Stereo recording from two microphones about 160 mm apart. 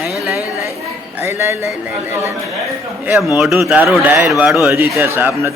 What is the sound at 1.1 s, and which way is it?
Music, 15° right (ahead or behind).